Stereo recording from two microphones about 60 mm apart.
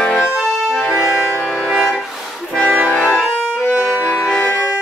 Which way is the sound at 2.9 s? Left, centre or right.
Left.